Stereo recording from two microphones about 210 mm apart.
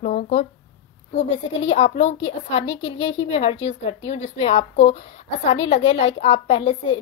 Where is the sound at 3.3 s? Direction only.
30° left (ahead or behind).